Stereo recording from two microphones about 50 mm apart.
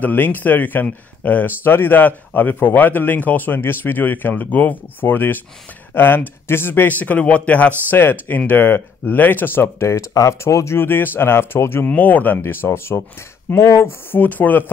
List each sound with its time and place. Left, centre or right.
0.0 s speech: left
1.6 s speech: left
8.0 s speech: left
9.8 s speech: left
10.8 s speech: left
11.9 s speech: left
12.4 s speech: left
13.6 s speech: left
14.1 s speech: left